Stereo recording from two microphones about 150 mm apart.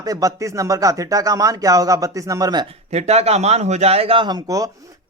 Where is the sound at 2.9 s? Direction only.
45° right (ahead or behind).